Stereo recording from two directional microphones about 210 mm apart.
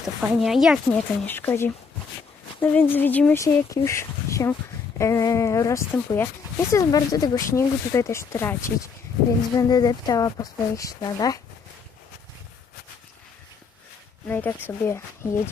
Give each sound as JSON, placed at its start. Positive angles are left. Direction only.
{"t": 0.0, "sound": "speech", "side_deg": 0}
{"t": 1.2, "sound": "speech", "side_deg": 10}
{"t": 14.3, "sound": "speech", "side_deg": 10}